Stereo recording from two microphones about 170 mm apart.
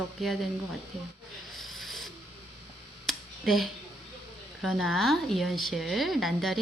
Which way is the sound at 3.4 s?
Centre (ahead or behind).